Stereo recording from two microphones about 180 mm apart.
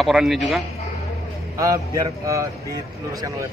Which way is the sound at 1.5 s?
20° right (ahead or behind).